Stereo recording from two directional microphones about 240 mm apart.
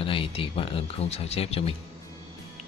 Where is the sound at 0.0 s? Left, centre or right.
Left.